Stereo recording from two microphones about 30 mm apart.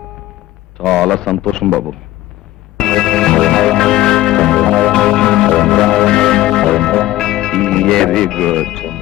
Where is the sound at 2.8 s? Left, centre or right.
Centre.